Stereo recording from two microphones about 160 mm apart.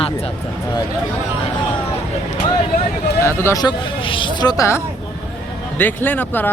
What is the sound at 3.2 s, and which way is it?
Speech, 20° left (ahead or behind).